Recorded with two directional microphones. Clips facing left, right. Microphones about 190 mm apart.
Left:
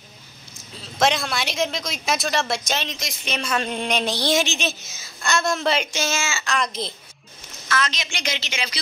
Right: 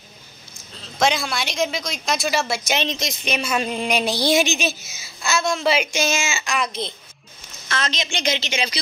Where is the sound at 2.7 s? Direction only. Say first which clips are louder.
Right 4 dB; 20° right (ahead or behind).